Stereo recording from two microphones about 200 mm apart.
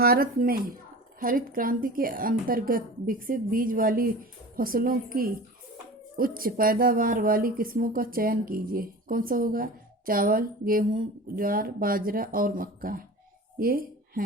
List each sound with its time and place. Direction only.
0.0 s a woman's voice: 50° right (ahead or behind)